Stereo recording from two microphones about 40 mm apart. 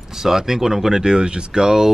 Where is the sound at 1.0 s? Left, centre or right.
Right.